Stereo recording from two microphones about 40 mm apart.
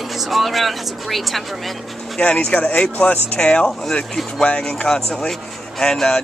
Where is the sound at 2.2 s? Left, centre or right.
Left.